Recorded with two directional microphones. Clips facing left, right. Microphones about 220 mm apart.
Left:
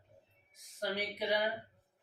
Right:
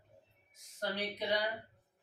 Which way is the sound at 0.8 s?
10° left (ahead or behind).